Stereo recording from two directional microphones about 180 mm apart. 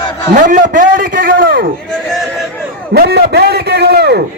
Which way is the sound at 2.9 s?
65° right (ahead or behind).